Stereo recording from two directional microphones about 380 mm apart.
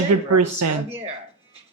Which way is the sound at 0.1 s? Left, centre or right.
Right.